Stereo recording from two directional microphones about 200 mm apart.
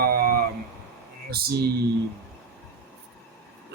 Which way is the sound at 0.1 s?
45° right (ahead or behind).